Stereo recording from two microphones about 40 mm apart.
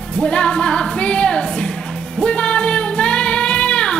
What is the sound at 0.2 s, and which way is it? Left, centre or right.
Music, left.